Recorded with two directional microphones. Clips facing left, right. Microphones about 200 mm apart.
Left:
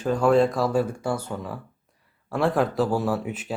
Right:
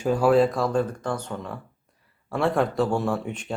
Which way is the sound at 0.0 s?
10° right (ahead or behind).